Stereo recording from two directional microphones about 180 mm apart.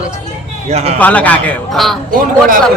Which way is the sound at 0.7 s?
35° right (ahead or behind).